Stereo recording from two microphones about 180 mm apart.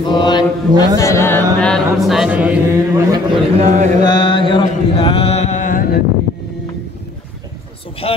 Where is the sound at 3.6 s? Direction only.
40° right (ahead or behind).